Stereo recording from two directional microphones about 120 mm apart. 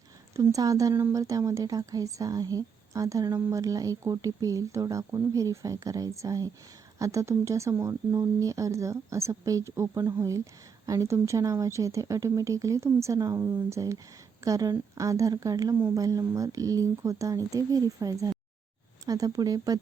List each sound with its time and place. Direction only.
0.3 s speech: 30° right (ahead or behind)